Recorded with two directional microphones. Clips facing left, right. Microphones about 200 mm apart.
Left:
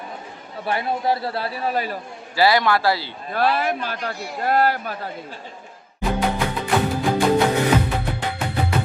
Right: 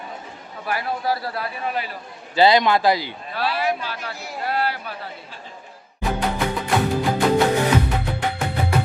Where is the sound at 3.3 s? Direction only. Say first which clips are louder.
Left 3 dB; 50° left (ahead or behind).